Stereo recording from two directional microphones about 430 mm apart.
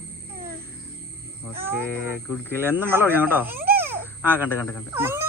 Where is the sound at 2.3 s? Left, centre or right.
Centre.